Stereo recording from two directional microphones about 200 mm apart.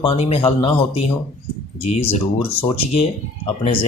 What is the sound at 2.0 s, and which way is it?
Speech, 30° left (ahead or behind).